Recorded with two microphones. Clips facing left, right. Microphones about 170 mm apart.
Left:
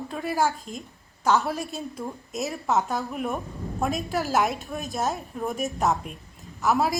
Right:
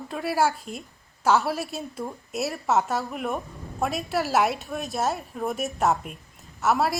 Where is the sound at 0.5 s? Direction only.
40° left (ahead or behind).